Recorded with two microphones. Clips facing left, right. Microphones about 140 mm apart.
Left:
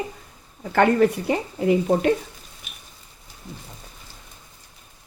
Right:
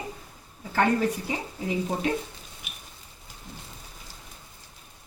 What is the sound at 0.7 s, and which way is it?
Speech, 65° left (ahead or behind).